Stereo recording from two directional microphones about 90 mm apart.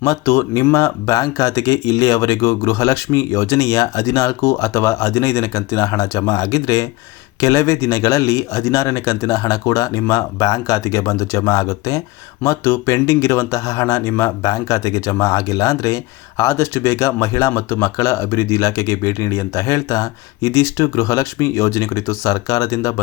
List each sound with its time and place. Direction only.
0.0 s speech: 35° left (ahead or behind)
12.4 s speech: 25° left (ahead or behind)